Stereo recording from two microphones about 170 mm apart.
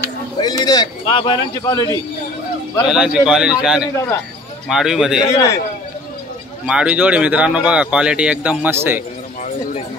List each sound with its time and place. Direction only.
0.4 s a man's voice: 25° left (ahead or behind)
2.9 s a man's voice: 5° right (ahead or behind)
5.3 s a man's voice: 20° left (ahead or behind)
6.6 s speech: 5° right (ahead or behind)